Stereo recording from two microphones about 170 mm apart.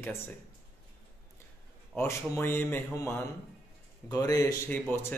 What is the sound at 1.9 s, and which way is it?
Speech, 15° left (ahead or behind).